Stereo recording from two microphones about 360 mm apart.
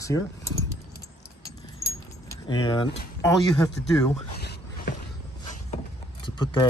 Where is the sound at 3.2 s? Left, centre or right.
Centre.